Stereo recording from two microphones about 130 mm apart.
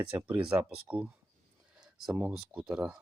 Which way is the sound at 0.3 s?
10° right (ahead or behind).